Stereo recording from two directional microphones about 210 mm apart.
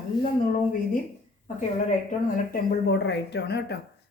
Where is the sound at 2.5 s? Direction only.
55° left (ahead or behind).